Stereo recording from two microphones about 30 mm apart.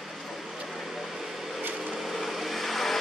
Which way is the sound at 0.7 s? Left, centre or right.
Centre.